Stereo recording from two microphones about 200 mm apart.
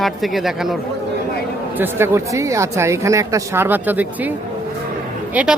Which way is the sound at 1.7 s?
10° right (ahead or behind).